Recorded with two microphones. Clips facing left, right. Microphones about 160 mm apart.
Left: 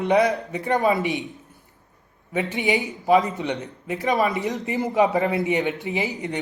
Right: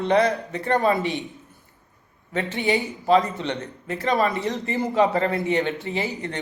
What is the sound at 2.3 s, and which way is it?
A man's voice, 15° left (ahead or behind).